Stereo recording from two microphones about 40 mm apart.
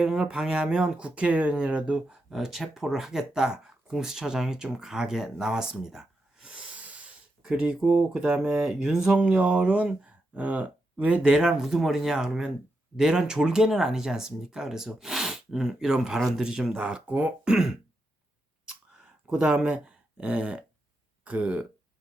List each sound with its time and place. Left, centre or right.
0.0 s speech: centre
2.3 s speech: centre
5.8 s a sound: centre
6.5 s a sound: right
6.8 s breathing: right
7.8 s speech: centre
8.8 s speech: centre
9.1 s speech: right
11.6 s speech: centre
12.1 s speech: centre
17.1 s speech: right
17.4 s speech: centre
19.3 s speech: right